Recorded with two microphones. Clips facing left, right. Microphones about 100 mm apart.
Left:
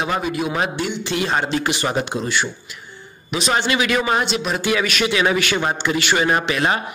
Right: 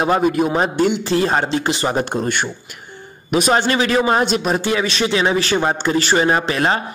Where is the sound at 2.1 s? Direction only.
50° right (ahead or behind).